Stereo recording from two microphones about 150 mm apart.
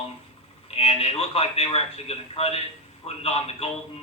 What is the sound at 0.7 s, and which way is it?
A man's voice, 40° left (ahead or behind).